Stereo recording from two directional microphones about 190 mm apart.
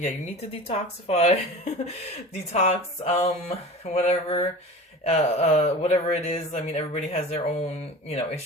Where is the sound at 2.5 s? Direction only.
35° left (ahead or behind).